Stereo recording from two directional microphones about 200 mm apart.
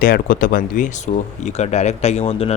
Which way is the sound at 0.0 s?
45° left (ahead or behind).